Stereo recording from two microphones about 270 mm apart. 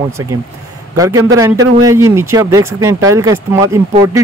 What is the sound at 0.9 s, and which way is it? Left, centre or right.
A man's voice, centre.